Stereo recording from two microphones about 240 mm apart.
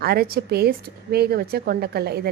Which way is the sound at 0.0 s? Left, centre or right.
Right.